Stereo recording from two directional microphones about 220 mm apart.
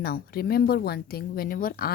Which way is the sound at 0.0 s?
45° left (ahead or behind).